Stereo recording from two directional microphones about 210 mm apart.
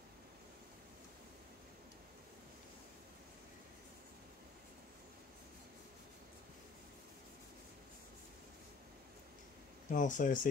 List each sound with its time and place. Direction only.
9.9 s speech: 35° left (ahead or behind)